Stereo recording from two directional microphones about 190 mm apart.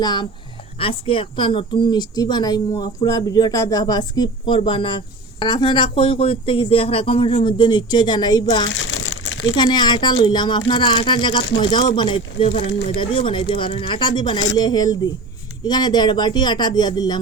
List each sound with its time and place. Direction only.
0.0 s speech: 20° left (ahead or behind)
8.7 s crumpling: 85° left
9.6 s speech: 20° left (ahead or behind)